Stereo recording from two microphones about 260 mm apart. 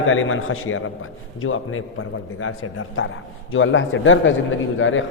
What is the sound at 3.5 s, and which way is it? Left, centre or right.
A man's voice, left.